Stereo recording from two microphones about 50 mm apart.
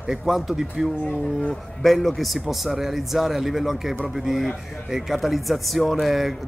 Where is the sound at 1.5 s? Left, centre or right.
Centre.